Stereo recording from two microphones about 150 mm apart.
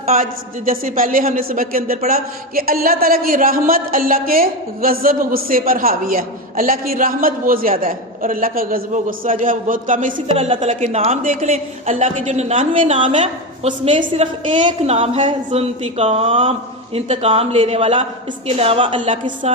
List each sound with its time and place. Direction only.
0.2 s a man's voice: 65° right (ahead or behind)
10.2 s a woman's voice: 40° right (ahead or behind)